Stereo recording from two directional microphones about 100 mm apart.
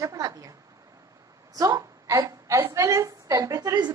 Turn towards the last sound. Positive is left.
turn(degrees=-40)  # may be behind; listen again after turning